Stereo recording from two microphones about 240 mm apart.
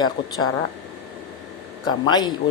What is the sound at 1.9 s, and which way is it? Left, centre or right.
Speech, centre.